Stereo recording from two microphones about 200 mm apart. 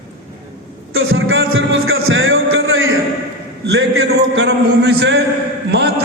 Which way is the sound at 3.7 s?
75° right (ahead or behind).